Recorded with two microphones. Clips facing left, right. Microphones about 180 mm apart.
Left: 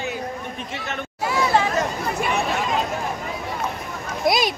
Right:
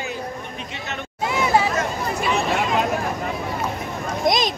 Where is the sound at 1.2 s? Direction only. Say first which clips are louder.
Right 1 dB; 20° right (ahead or behind).